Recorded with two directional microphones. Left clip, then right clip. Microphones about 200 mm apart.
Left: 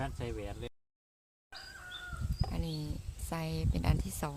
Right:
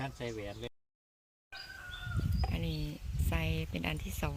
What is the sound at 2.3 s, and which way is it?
Bird, centre (ahead or behind).